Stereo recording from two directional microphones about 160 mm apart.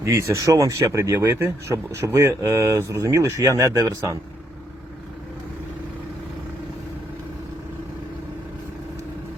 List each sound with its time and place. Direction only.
0.0 s speech: 20° right (ahead or behind)